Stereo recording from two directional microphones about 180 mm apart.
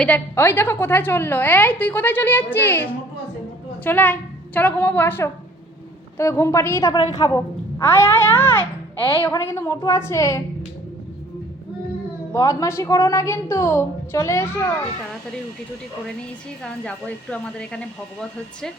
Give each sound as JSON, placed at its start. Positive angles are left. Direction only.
{"t": 0.0, "sound": "a woman's voice", "side_deg": 10}
{"t": 12.3, "sound": "a woman's voice", "side_deg": 20}
{"t": 16.6, "sound": "speech", "side_deg": 5}